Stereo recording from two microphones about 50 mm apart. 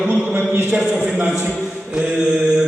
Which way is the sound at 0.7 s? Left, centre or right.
Centre.